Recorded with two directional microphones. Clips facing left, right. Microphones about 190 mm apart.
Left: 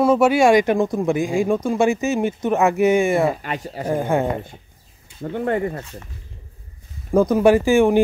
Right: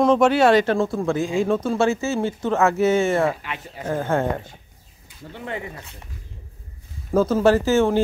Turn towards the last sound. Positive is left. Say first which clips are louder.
# left 3 dB
turn(degrees=15)  # may be behind; listen again after turning